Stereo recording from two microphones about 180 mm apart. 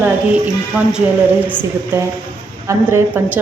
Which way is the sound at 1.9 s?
10° right (ahead or behind).